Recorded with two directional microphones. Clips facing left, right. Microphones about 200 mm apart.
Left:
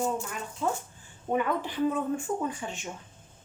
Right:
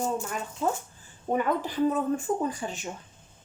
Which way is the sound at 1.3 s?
40° right (ahead or behind).